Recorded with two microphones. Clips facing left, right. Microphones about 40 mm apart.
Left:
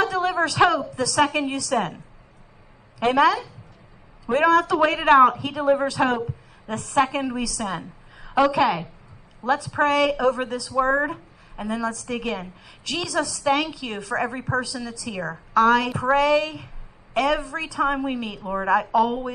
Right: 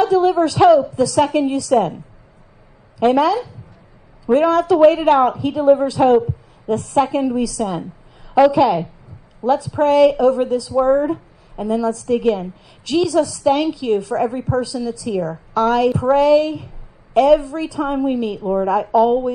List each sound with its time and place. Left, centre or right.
0.0 s a woman's voice: left
0.6 s a woman's voice: left
1.7 s a woman's voice: left
3.0 s a woman's voice: left
4.6 s a woman's voice: left